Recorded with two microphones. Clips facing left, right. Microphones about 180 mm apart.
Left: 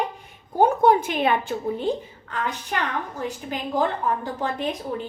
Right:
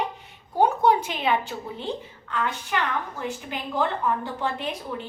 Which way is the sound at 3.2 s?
40° left (ahead or behind).